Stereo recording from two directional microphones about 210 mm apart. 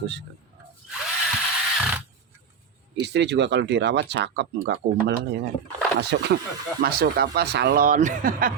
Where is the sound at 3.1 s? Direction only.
55° right (ahead or behind).